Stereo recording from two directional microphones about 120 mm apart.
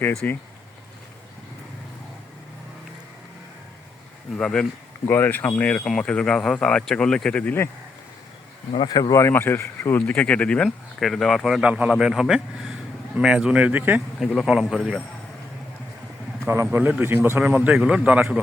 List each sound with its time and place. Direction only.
0.2 s speech: 15° left (ahead or behind)
4.4 s speech: 5° left (ahead or behind)
8.7 s a man's voice: 40° left (ahead or behind); by 14.0 s 15° right (ahead or behind)
14.3 s speech: 5° right (ahead or behind)
16.5 s a man's voice: 20° right (ahead or behind)
17.4 s a man's voice: 10° right (ahead or behind)